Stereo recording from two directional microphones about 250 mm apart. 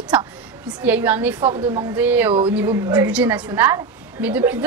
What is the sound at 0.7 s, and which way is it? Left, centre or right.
A woman's voice, centre.